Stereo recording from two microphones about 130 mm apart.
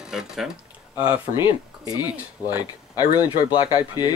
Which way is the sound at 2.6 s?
30° left (ahead or behind).